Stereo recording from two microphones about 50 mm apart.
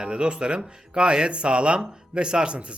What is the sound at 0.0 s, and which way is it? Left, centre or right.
Speech, centre.